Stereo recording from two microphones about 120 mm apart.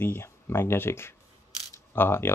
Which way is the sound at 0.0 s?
20° left (ahead or behind).